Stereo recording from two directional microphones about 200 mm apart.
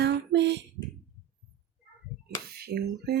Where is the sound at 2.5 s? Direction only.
50° right (ahead or behind).